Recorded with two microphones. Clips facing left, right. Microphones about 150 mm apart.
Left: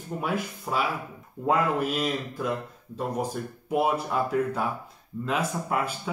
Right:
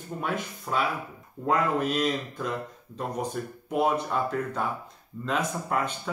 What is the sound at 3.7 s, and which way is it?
Speech, 5° left (ahead or behind).